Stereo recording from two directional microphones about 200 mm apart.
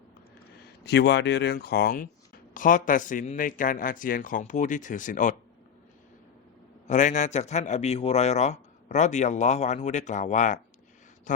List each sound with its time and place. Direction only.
0.9 s a man's voice: 60° left (ahead or behind); by 5.4 s 40° left (ahead or behind)
6.8 s a man's voice: 35° left (ahead or behind)